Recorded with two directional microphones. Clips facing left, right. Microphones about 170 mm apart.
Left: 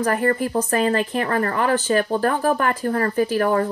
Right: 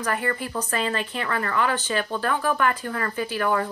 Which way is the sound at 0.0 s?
40° left (ahead or behind).